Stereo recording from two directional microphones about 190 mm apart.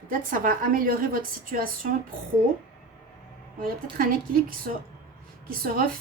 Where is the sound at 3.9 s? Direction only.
50° right (ahead or behind).